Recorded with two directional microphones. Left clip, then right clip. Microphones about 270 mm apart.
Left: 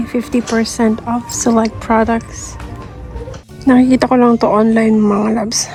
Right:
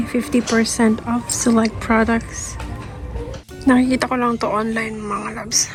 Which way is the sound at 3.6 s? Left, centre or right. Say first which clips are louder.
Left 5 dB; centre.